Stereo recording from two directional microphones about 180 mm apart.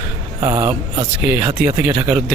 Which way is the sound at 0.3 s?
20° right (ahead or behind).